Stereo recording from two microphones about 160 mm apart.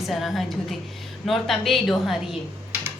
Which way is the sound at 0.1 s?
Centre (ahead or behind).